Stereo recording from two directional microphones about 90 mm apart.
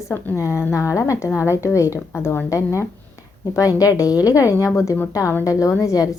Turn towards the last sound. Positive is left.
turn(degrees=40)  # may be behind; listen again after turning